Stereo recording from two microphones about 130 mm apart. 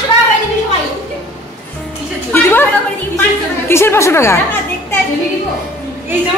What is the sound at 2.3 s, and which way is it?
Speech, 15° left (ahead or behind).